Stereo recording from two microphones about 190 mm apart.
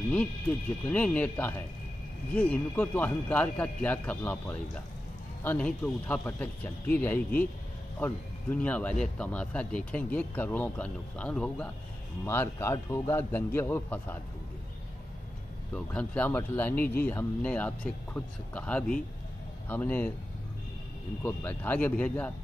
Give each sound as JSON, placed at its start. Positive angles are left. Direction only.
{"t": 0.1, "sound": "speech", "side_deg": 5}
{"t": 15.7, "sound": "speech", "side_deg": 5}
{"t": 21.2, "sound": "speech", "side_deg": 10}